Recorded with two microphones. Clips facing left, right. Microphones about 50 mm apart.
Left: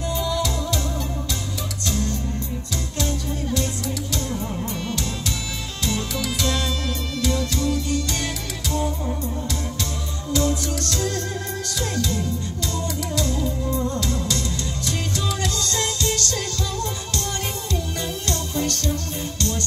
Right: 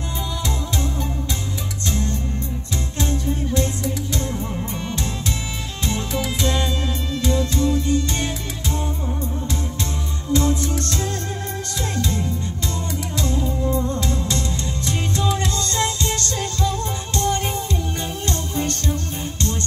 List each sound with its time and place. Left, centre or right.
0.2 s music: right
1.9 s music: right
3.5 s music: right
5.9 s music: right
10.3 s music: right